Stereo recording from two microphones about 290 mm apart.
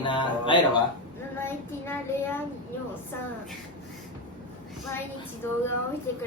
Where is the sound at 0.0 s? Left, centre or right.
Centre.